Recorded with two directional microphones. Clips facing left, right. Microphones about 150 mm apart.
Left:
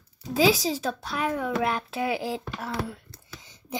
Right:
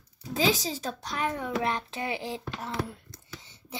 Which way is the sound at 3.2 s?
15° left (ahead or behind).